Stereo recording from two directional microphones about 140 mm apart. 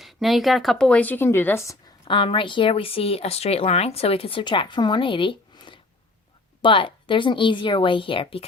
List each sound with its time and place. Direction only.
0.0 s speech: centre (ahead or behind); by 1.7 s 15° left (ahead or behind)
2.0 s speech: 35° left (ahead or behind)